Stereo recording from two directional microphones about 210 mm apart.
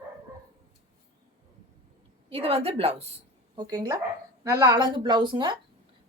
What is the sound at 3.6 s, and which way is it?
A woman's voice, 20° right (ahead or behind).